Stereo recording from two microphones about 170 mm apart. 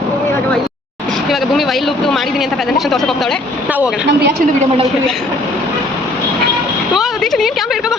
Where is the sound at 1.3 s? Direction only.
Centre (ahead or behind).